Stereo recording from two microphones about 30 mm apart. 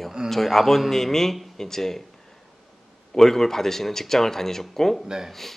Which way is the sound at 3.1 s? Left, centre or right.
Centre.